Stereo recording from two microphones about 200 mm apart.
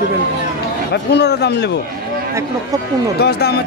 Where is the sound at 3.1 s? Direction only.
55° left (ahead or behind).